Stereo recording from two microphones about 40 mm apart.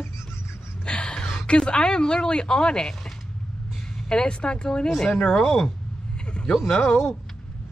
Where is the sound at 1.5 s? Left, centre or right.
Left.